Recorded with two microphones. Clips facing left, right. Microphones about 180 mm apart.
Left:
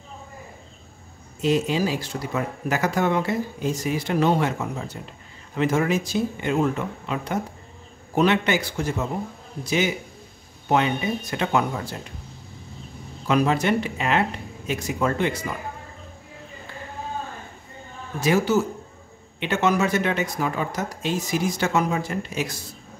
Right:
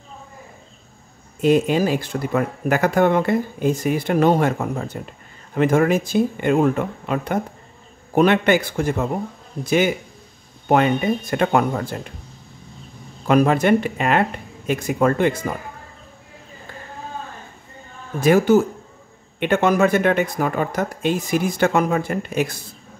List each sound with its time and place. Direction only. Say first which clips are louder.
1.4 s speech: right 5 dB; 55° right (ahead or behind)
13.3 s speech: right 5 dB; 50° right (ahead or behind)
18.2 s speech: right 6 dB; 50° right (ahead or behind)